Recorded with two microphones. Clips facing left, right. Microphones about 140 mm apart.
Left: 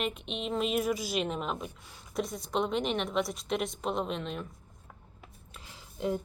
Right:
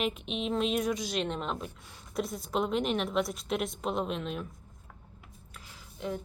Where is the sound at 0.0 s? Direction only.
Centre (ahead or behind).